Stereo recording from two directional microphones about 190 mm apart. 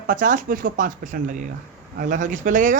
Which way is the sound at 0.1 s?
45° right (ahead or behind).